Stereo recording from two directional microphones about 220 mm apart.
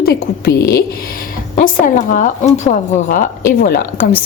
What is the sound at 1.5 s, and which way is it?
A woman's voice, 35° left (ahead or behind).